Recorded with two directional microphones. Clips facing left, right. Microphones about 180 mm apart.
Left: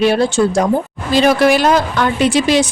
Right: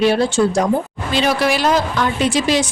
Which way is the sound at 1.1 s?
50° left (ahead or behind).